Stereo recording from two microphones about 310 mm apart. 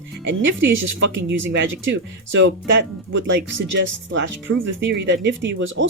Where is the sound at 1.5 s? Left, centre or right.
Right.